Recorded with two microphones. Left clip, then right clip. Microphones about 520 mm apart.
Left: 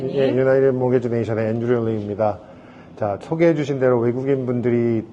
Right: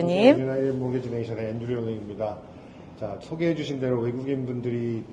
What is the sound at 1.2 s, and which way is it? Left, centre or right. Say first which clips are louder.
Speech: left 9 dB; left.